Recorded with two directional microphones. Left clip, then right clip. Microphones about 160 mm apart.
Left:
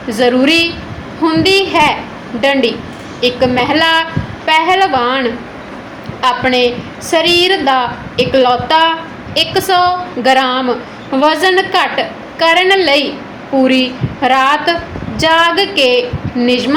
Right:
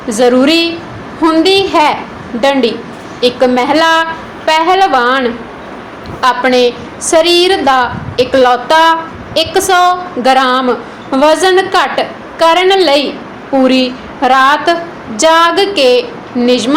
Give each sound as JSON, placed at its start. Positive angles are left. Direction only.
{"t": 0.1, "sound": "a woman's voice", "side_deg": -20}